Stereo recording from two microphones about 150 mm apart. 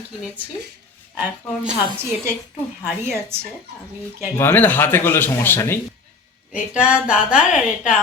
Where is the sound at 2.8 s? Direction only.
15° right (ahead or behind).